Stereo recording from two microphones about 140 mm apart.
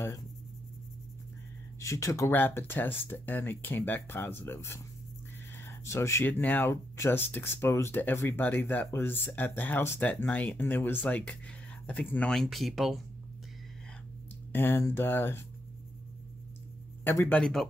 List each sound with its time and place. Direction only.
1.8 s speech: 20° left (ahead or behind); by 13.0 s centre (ahead or behind)
14.5 s speech: 15° left (ahead or behind)
17.0 s speech: 15° left (ahead or behind)
17.4 s speech: centre (ahead or behind)